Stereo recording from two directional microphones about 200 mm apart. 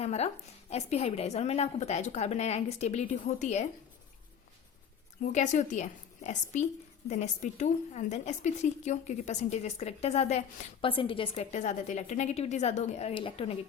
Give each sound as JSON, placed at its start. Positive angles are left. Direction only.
{"t": 0.0, "sound": "a woman's voice", "side_deg": 30}
{"t": 5.2, "sound": "a woman's voice", "side_deg": 35}